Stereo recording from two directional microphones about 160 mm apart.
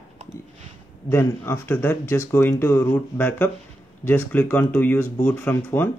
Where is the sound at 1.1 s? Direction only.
15° left (ahead or behind).